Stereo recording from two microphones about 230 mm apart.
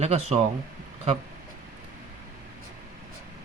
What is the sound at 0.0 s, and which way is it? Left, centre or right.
Speech, right.